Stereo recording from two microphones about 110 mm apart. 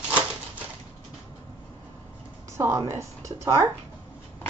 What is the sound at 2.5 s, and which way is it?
Speech, 25° right (ahead or behind).